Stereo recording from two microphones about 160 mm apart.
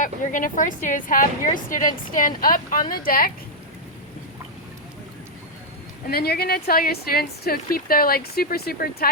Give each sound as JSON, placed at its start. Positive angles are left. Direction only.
{"t": 0.0, "sound": "speech", "side_deg": 55}
{"t": 6.1, "sound": "a woman's voice", "side_deg": 75}